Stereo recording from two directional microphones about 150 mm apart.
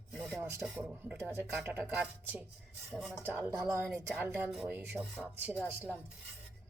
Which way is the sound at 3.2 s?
15° right (ahead or behind).